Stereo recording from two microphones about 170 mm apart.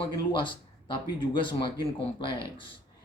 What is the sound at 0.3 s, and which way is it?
Speech, 30° left (ahead or behind).